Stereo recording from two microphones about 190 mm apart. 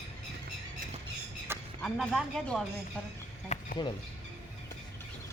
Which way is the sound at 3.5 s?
35° left (ahead or behind).